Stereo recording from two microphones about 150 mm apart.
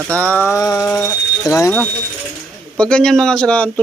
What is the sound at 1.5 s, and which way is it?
Speech, 15° left (ahead or behind).